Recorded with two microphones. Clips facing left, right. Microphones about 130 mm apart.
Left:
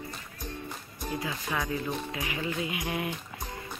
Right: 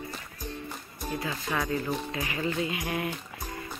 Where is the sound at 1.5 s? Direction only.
Centre (ahead or behind); by 3.1 s 20° left (ahead or behind).